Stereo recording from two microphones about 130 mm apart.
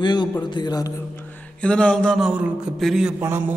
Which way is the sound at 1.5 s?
10° left (ahead or behind).